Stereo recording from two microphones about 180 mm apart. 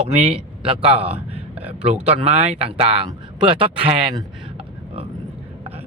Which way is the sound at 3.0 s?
30° right (ahead or behind).